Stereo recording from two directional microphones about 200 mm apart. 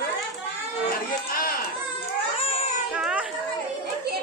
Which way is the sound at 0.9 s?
45° left (ahead or behind).